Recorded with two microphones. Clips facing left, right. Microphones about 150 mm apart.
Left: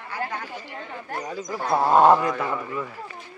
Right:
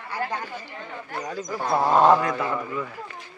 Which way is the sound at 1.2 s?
5° left (ahead or behind).